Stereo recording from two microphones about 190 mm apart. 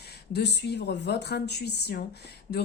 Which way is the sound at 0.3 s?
60° left (ahead or behind).